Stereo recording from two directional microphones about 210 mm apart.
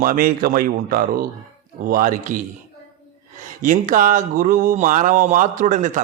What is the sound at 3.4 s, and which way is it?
A man's voice, 40° right (ahead or behind).